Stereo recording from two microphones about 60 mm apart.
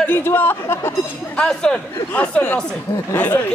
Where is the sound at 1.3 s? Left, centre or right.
Centre.